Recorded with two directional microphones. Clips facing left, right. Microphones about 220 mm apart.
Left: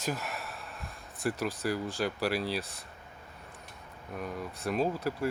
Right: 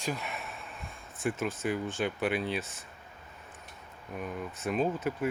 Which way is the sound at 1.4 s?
Centre (ahead or behind).